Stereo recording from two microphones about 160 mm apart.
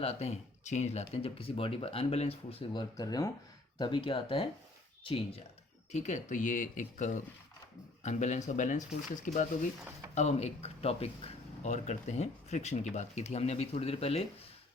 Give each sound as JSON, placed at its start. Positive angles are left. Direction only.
{"t": 0.0, "sound": "speech", "side_deg": 40}
{"t": 5.9, "sound": "speech", "side_deg": 50}